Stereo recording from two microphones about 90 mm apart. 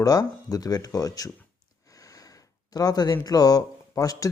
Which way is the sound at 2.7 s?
45° left (ahead or behind).